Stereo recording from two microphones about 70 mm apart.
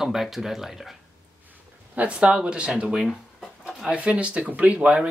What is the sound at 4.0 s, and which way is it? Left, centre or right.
Speech, centre.